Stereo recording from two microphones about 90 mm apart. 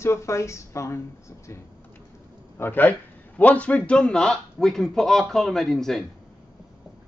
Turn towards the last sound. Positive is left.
turn(degrees=0)  # may be behind; listen again after turning